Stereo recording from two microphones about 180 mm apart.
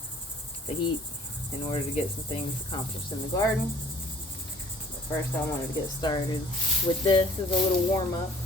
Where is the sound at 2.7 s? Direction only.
25° left (ahead or behind).